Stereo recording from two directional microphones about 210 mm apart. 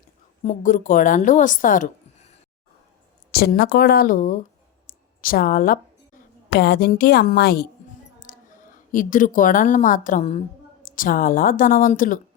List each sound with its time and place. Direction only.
0.4 s a woman's voice: 40° left (ahead or behind)
3.3 s a woman's voice: 50° left (ahead or behind)
4.9 s a sound: 45° left (ahead or behind)
6.6 s a woman's voice: 50° left (ahead or behind)
8.3 s a sound: 40° left (ahead or behind)
8.9 s a woman's voice: 40° left (ahead or behind)